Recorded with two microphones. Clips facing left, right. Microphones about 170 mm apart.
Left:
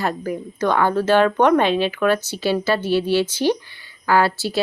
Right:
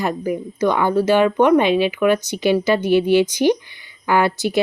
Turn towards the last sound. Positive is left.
turn(degrees=-20)  # may be behind; listen again after turning